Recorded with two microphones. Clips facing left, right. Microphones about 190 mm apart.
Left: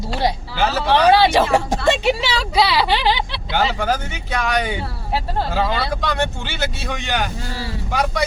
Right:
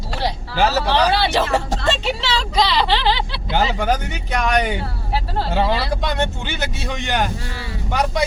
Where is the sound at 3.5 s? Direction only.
20° right (ahead or behind).